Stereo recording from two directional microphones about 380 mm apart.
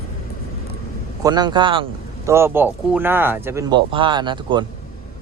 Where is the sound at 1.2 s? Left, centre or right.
Centre.